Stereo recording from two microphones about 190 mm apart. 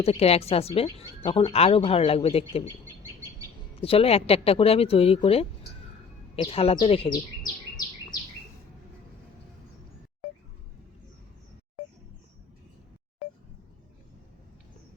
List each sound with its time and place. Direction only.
0.0 s speech: 30° left (ahead or behind)
3.8 s speech: 30° left (ahead or behind)